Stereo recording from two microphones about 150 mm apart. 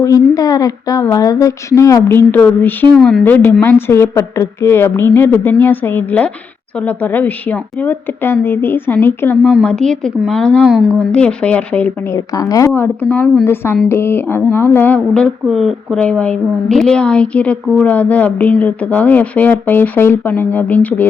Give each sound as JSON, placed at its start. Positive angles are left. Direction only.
{"t": 0.0, "sound": "speech", "side_deg": 25}
{"t": 3.0, "sound": "speech", "side_deg": 0}
{"t": 3.2, "sound": "speech", "side_deg": 15}
{"t": 9.4, "sound": "speech", "side_deg": -5}
{"t": 12.1, "sound": "speech", "side_deg": 20}
{"t": 13.4, "sound": "speech", "side_deg": 15}